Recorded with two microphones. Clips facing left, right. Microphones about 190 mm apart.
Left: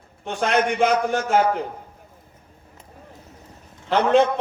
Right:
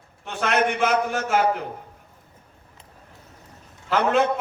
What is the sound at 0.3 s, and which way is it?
Speech, 30° left (ahead or behind).